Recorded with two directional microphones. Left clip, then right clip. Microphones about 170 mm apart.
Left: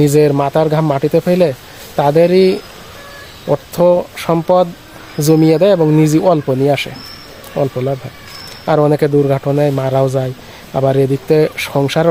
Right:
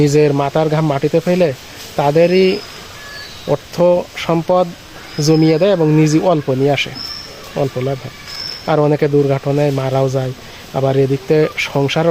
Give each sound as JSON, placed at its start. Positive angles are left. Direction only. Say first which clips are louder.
{"t": 0.0, "sound": "speech", "louder": "left 2 dB", "side_deg": 15}